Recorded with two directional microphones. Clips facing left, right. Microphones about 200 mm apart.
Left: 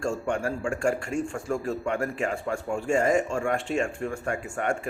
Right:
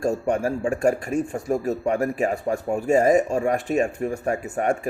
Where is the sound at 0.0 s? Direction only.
20° right (ahead or behind).